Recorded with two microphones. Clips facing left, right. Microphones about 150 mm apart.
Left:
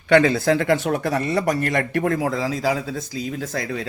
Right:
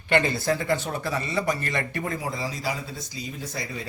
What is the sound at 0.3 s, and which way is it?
A man's voice, 85° left.